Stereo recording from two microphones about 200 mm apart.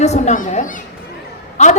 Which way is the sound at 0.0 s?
35° left (ahead or behind).